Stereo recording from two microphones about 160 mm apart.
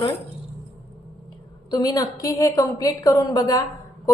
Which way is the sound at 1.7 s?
25° left (ahead or behind).